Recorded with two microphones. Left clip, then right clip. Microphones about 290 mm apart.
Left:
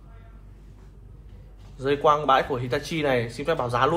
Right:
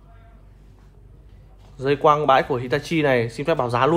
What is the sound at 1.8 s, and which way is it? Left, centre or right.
Speech, right.